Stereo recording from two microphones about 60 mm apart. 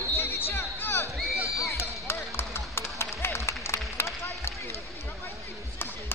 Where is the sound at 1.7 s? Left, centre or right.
Left.